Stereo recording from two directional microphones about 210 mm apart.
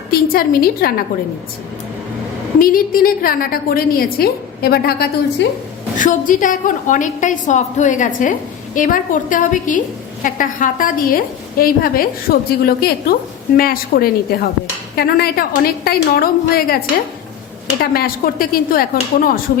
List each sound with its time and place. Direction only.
0.1 s a woman's voice: 45° left (ahead or behind)
2.6 s a woman's voice: 45° left (ahead or behind)
17.9 s a woman's voice: 45° left (ahead or behind)